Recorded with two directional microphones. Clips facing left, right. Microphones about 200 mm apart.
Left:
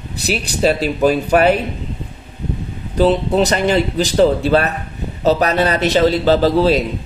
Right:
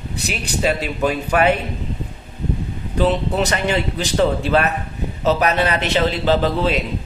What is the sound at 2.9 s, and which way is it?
A man's voice, 35° left (ahead or behind).